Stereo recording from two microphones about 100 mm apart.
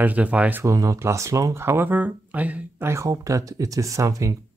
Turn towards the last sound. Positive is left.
turn(degrees=-35)  # may be behind; listen again after turning